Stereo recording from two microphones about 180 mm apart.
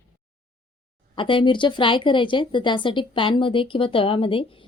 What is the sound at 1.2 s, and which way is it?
A woman's voice, 30° left (ahead or behind).